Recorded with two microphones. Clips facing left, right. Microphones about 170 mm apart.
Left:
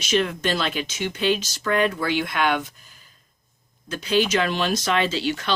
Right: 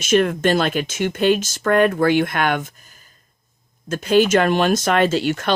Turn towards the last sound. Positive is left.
turn(degrees=-50)  # may be behind; listen again after turning